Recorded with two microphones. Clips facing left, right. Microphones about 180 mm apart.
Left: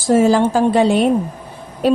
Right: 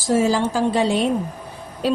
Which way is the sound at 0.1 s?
60° left (ahead or behind).